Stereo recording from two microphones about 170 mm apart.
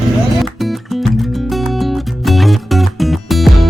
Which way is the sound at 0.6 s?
Centre (ahead or behind).